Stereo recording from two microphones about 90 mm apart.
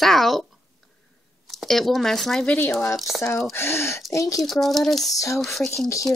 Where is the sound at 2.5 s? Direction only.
25° left (ahead or behind).